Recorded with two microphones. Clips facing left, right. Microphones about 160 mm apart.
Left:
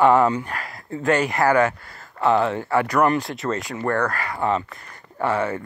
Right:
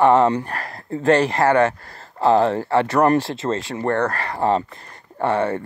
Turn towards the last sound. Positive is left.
turn(degrees=-30)  # may be behind; listen again after turning